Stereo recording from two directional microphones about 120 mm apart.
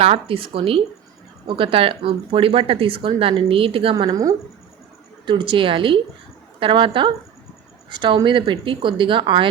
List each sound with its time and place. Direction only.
0.0 s speech: 50° right (ahead or behind)
4.1 s speech: 30° right (ahead or behind)
5.2 s speech: 45° right (ahead or behind)